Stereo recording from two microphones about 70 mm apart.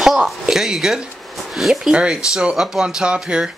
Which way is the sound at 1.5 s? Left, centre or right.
Centre.